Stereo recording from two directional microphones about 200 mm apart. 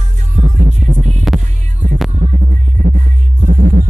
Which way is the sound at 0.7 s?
35° right (ahead or behind).